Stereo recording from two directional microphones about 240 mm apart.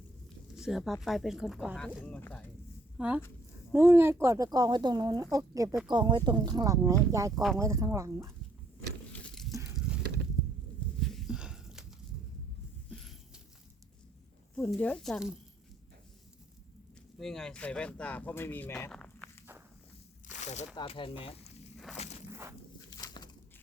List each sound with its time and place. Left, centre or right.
0.3 s speech: centre
3.0 s speech: centre
9.1 s a sound: centre
14.5 s speech: centre
17.2 s speech: centre
20.2 s slosh: left
20.7 s speech: left
21.9 s speech: centre
22.3 s walk: centre
22.9 s a sound: centre